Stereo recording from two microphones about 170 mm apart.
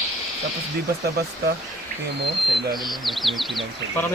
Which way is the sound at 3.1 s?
Centre (ahead or behind).